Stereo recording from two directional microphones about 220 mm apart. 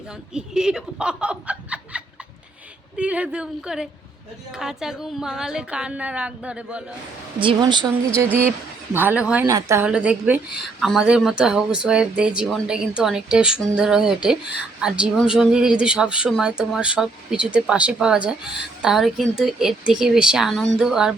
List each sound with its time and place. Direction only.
0.3 s speech: 5° right (ahead or behind)
7.3 s speech: 20° right (ahead or behind)
8.9 s speech: 10° right (ahead or behind)